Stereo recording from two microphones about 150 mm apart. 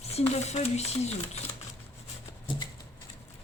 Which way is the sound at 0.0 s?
45° left (ahead or behind).